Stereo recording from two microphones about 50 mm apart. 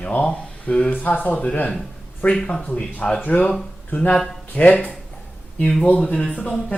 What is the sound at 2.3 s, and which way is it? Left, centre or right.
Speech, centre.